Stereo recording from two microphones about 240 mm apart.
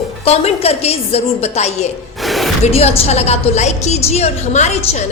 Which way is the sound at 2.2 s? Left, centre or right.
Centre.